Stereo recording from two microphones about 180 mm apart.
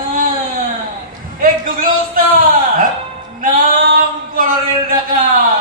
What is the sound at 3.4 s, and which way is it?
Music, 50° right (ahead or behind).